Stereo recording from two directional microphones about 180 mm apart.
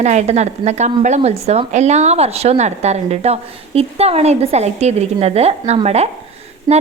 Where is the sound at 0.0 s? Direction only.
40° right (ahead or behind).